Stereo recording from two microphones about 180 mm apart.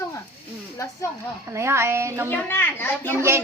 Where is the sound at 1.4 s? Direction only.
15° right (ahead or behind).